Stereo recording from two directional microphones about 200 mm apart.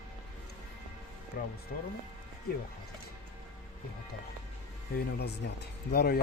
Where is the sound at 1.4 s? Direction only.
50° left (ahead or behind).